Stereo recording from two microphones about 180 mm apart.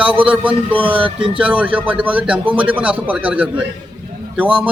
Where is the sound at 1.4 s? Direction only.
5° right (ahead or behind).